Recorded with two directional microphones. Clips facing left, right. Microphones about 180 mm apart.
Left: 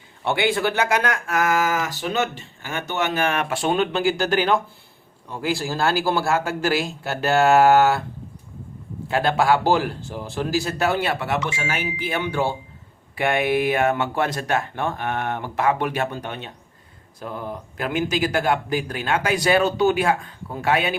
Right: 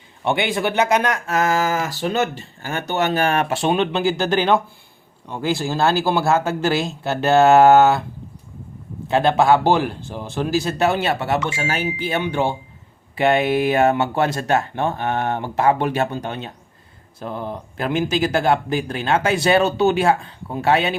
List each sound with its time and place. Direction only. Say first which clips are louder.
0.3 s speech: right 1 dB; 20° right (ahead or behind)
9.0 s speech: right 4 dB; 20° right (ahead or behind)
11.3 s speech: right 3 dB; 55° right (ahead or behind)
11.7 s speech: right 3 dB; 30° right (ahead or behind)